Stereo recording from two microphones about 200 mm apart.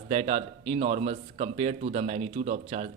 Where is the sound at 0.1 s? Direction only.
35° right (ahead or behind).